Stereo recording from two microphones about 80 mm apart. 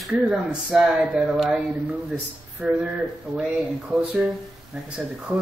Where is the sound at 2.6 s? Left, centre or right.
Right.